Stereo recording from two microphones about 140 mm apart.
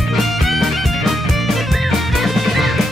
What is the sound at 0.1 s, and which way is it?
Music, centre (ahead or behind).